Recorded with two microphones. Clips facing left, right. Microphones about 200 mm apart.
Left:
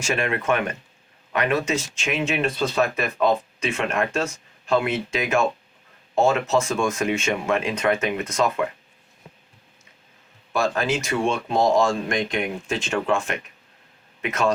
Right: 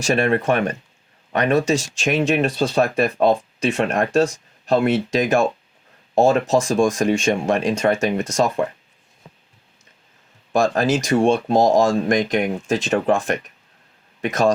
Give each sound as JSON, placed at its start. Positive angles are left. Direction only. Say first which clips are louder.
{"t": 0.0, "sound": "speech", "louder": "right 6 dB", "side_deg": -40}
{"t": 10.5, "sound": "speech", "louder": "right 5 dB", "side_deg": -40}